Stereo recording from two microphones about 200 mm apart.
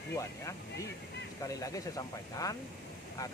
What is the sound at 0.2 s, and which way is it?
Speech, 15° left (ahead or behind).